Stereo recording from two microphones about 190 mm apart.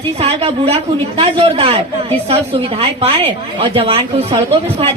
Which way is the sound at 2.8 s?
30° right (ahead or behind).